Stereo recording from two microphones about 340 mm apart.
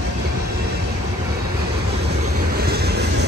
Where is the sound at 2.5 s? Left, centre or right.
Right.